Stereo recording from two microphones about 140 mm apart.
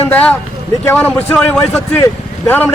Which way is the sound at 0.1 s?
10° left (ahead or behind).